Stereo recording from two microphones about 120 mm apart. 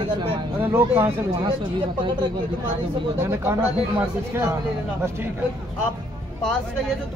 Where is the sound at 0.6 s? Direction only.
15° right (ahead or behind).